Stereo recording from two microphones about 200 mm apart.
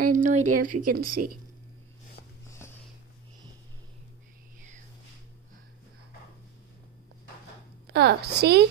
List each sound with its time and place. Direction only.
0.0 s a woman's voice: 40° right (ahead or behind)
2.6 s a sound: 10° left (ahead or behind)
7.8 s a woman's voice: 55° right (ahead or behind)